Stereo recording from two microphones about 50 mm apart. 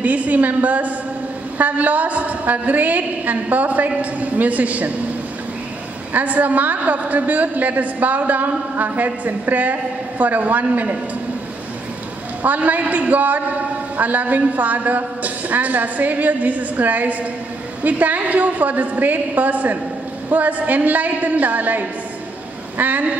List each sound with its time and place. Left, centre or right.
0.0 s a woman's voice: right
6.1 s a woman's voice: right
12.4 s a woman's voice: right